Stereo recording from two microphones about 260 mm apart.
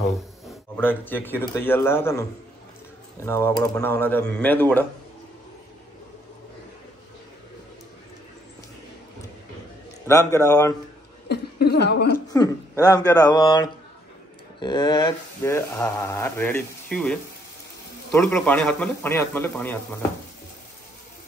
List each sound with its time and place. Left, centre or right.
0.0 s a man's voice: centre
3.3 s speech: centre
10.0 s speech: centre
11.2 s speech: left
12.3 s speech: centre